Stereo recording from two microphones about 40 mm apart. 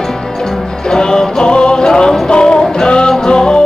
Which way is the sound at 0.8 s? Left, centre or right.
Centre.